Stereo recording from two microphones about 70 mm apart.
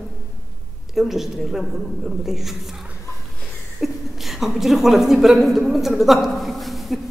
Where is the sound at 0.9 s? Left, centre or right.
Centre.